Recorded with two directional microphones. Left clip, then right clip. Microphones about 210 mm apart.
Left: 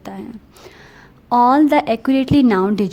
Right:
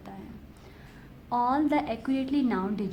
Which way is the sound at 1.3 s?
45° left (ahead or behind).